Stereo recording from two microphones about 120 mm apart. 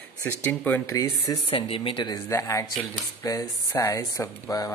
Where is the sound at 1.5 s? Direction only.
50° left (ahead or behind).